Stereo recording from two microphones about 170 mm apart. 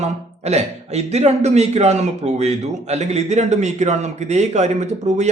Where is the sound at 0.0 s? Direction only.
40° right (ahead or behind).